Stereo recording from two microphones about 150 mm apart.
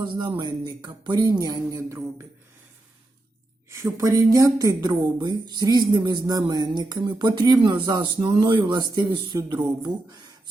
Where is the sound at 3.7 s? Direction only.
20° right (ahead or behind).